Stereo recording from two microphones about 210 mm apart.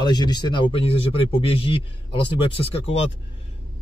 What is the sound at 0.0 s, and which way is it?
Speech, 20° left (ahead or behind).